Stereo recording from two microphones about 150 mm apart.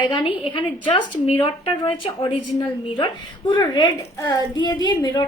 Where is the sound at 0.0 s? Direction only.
35° left (ahead or behind).